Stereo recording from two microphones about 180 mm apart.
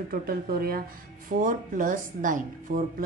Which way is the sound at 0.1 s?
55° right (ahead or behind).